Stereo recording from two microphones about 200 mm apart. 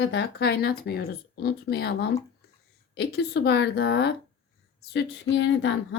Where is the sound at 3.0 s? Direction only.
55° left (ahead or behind).